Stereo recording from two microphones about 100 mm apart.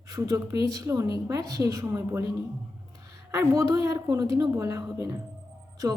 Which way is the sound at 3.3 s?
30° right (ahead or behind).